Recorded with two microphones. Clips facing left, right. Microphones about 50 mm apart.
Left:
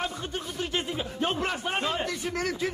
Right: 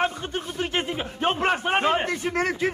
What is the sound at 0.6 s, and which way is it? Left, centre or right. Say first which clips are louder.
A man's voice: right 4 dB; right.